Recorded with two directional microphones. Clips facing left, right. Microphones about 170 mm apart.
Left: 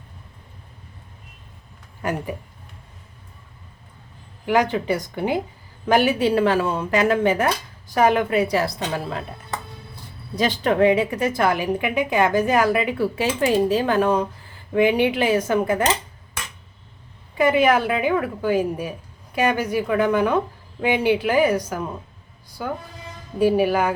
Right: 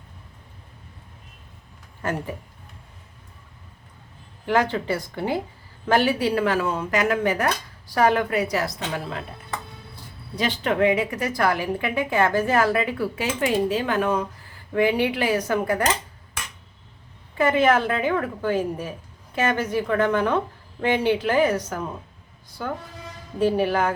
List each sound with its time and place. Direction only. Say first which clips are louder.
2.0 s speech: left 2 dB; 15° left (ahead or behind)
4.4 s a woman's voice: left 2 dB; 15° left (ahead or behind)
10.3 s a woman's voice: left 4 dB; 40° left (ahead or behind); by 13.0 s 15° left (ahead or behind)
13.0 s speech: left 3 dB; 30° left (ahead or behind)
14.7 s a woman's voice: left 3 dB; 20° left (ahead or behind)
17.3 s a woman's voice: left 2 dB; 10° left (ahead or behind)